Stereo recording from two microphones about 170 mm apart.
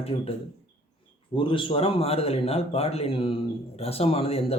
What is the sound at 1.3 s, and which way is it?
Speech, 30° left (ahead or behind).